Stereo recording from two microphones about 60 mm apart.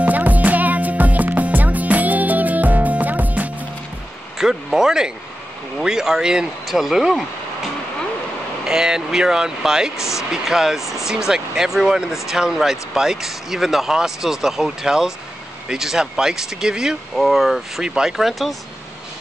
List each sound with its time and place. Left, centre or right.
0.0 s music: right
4.4 s speech: centre
8.6 s speech: centre